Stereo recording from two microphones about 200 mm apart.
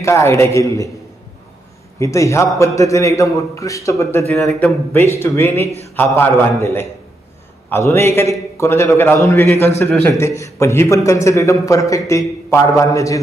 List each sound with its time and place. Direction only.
0.0 s a man's voice: 15° left (ahead or behind)
2.0 s a man's voice: 15° left (ahead or behind)